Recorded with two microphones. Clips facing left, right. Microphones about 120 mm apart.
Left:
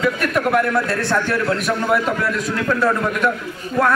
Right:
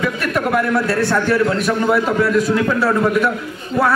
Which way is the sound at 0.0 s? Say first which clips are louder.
Left 1 dB; centre (ahead or behind).